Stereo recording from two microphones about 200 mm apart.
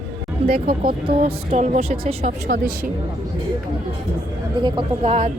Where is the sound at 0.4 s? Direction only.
50° right (ahead or behind).